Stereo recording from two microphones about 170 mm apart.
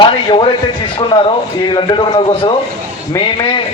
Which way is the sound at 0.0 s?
30° left (ahead or behind).